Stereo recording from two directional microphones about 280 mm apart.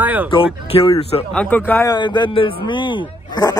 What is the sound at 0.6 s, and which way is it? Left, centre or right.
Speech, centre.